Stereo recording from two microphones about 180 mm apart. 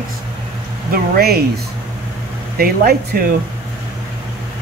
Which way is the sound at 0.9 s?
60° right (ahead or behind).